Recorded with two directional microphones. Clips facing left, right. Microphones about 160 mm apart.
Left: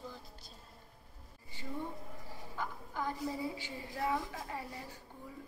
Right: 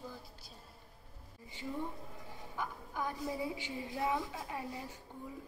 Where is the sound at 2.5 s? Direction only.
15° right (ahead or behind).